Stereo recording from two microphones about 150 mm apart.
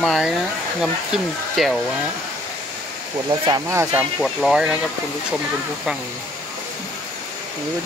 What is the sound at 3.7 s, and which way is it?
Speech, 15° right (ahead or behind).